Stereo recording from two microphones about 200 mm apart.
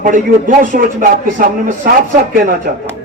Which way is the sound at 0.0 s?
40° right (ahead or behind).